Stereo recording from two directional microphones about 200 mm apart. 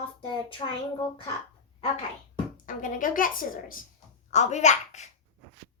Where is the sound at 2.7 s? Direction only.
40° left (ahead or behind).